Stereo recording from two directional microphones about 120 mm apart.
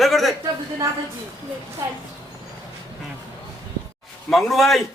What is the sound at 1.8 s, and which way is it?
Speech, 25° right (ahead or behind).